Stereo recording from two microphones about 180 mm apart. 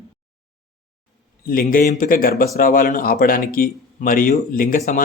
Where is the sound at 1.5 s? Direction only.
55° left (ahead or behind).